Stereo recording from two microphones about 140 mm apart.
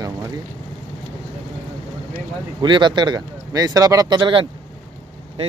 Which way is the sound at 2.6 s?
35° right (ahead or behind).